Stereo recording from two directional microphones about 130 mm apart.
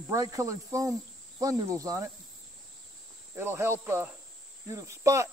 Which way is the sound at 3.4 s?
20° right (ahead or behind).